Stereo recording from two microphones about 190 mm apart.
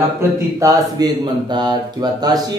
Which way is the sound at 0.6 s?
20° right (ahead or behind).